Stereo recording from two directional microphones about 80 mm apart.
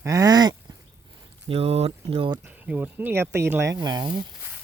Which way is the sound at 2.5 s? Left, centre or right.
Right.